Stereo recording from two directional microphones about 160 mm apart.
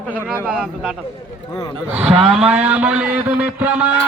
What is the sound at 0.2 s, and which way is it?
Speech, 10° right (ahead or behind).